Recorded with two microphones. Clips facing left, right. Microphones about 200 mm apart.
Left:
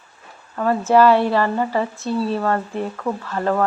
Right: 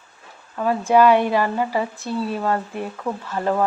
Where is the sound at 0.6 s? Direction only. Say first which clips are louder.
Left 1 dB; 10° right (ahead or behind).